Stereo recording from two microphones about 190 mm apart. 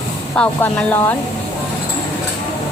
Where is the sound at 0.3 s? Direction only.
10° left (ahead or behind).